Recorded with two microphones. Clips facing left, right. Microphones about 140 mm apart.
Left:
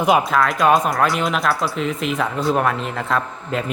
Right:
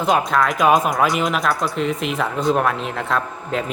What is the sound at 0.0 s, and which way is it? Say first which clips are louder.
Speech: left 1 dB; 5° left (ahead or behind).